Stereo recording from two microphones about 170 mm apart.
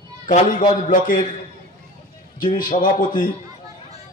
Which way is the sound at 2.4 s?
55° left (ahead or behind).